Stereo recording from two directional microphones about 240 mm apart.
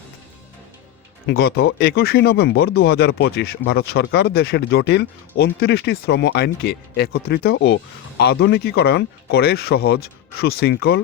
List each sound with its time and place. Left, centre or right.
1.3 s speech: left